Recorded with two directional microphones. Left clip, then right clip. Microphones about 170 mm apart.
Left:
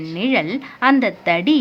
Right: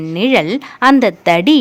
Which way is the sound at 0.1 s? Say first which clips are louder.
Right 6 dB; 45° right (ahead or behind).